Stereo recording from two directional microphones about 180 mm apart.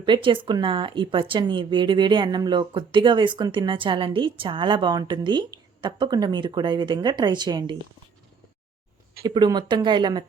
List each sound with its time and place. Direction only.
0.0 s a woman's voice: 25° right (ahead or behind)
9.2 s a woman's voice: 25° right (ahead or behind)